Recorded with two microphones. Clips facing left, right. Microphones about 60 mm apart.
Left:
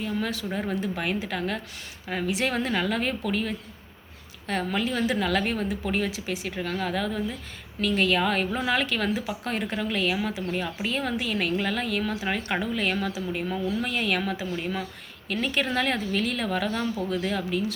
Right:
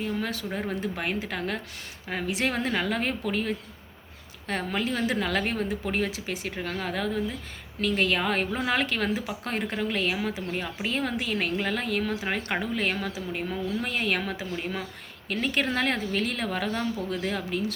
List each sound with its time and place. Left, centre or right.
0.0 s a woman's voice: right